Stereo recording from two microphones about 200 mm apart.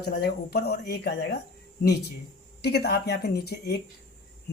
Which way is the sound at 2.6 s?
55° left (ahead or behind).